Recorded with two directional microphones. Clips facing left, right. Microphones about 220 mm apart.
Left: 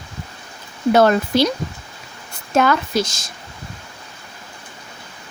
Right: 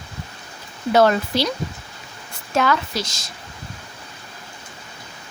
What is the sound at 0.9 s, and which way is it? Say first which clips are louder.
Speech: left 2 dB; 50° left (ahead or behind).